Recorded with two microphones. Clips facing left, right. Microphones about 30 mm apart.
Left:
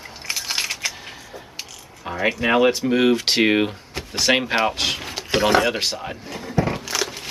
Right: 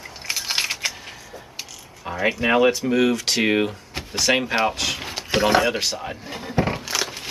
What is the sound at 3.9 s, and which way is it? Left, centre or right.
Drawer open or close, centre.